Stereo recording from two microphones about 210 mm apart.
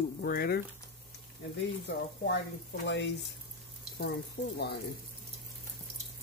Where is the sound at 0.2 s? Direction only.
45° left (ahead or behind).